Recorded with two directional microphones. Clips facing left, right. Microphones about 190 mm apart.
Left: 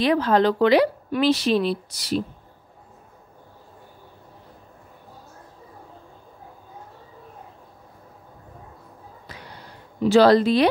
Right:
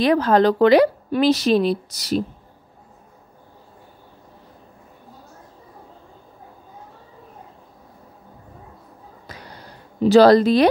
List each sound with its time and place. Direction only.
0.0 s a woman's voice: 45° right (ahead or behind)
9.3 s a sound: 40° right (ahead or behind)
10.0 s a woman's voice: 40° right (ahead or behind)